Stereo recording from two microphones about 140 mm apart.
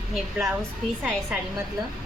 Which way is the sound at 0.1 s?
5° right (ahead or behind).